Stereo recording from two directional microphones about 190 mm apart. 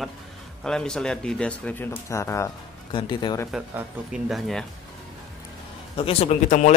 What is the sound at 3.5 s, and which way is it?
Speech, 5° right (ahead or behind).